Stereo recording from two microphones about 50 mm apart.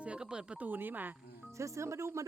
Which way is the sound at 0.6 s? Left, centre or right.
Right.